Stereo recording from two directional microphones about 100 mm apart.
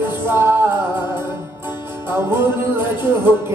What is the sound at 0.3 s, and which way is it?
Music, 20° right (ahead or behind).